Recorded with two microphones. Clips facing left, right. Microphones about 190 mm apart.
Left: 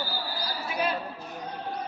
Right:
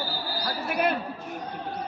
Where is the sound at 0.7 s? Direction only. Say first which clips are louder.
Right 4 dB; 60° right (ahead or behind).